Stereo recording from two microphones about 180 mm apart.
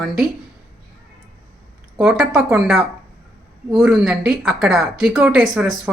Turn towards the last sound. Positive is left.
turn(degrees=-5)  # may be behind; listen again after turning